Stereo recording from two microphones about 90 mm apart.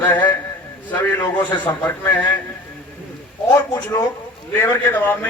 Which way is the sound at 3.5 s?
35° left (ahead or behind).